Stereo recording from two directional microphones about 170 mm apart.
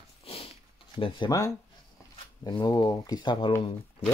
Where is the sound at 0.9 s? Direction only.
30° left (ahead or behind).